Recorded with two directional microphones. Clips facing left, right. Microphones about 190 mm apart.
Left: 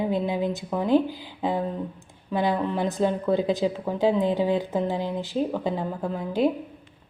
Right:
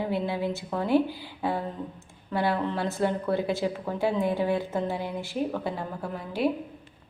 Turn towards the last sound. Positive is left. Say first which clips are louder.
# left 4 dB
turn(degrees=20)  # may be behind; listen again after turning